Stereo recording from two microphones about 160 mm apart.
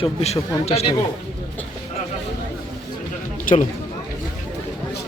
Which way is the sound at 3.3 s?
55° left (ahead or behind).